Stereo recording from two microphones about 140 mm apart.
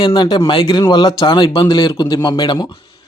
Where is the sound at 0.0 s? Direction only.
35° left (ahead or behind).